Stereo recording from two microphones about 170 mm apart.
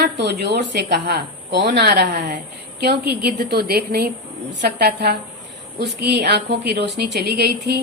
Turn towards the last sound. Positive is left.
turn(degrees=-70)  # may be behind; listen again after turning